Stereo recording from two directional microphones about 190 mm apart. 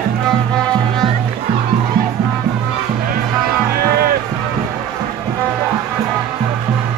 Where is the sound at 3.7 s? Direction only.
55° right (ahead or behind).